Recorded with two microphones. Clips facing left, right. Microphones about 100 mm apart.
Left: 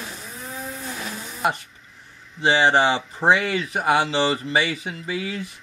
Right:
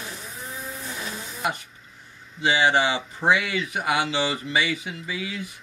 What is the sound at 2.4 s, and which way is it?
Speech, 35° left (ahead or behind).